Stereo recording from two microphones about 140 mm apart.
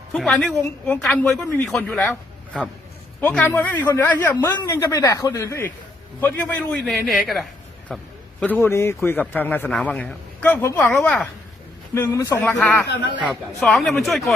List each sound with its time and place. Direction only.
0.1 s a woman's voice: 5° left (ahead or behind)
11.9 s a man's voice: 20° left (ahead or behind)
13.6 s a woman's voice: centre (ahead or behind)